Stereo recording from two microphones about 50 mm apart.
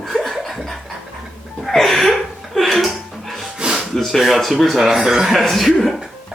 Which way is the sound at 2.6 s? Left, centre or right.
Centre.